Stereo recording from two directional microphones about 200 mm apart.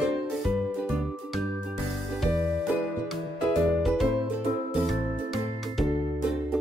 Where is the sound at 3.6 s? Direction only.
Centre (ahead or behind).